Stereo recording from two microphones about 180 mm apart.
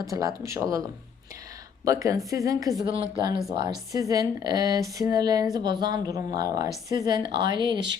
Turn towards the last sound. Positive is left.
turn(degrees=-25)  # may be behind; listen again after turning